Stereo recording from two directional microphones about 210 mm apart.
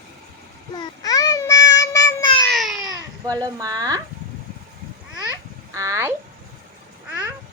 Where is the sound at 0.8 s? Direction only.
20° left (ahead or behind).